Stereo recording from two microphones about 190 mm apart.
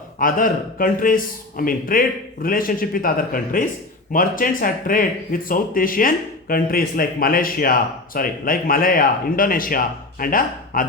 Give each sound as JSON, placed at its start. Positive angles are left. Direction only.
{"t": 0.2, "sound": "speech", "side_deg": 45}